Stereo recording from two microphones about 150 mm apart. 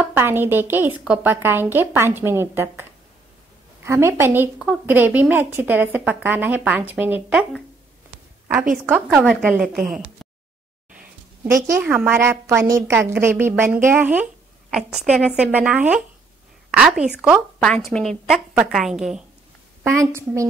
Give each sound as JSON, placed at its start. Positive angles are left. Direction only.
{"t": 0.0, "sound": "a woman's voice", "side_deg": -15}
{"t": 3.8, "sound": "a woman's voice", "side_deg": -15}
{"t": 8.8, "sound": "a woman's voice", "side_deg": -5}
{"t": 11.6, "sound": "a woman's voice", "side_deg": -10}
{"t": 17.6, "sound": "a woman's voice", "side_deg": 5}
{"t": 19.8, "sound": "a woman's voice", "side_deg": -15}